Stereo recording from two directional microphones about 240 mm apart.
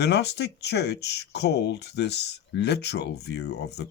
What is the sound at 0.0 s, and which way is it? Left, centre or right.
Speech, left.